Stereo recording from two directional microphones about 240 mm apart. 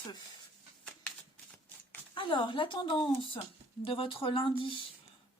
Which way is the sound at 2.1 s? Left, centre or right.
Left.